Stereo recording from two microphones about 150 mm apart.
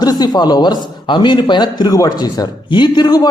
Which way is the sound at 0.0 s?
25° left (ahead or behind).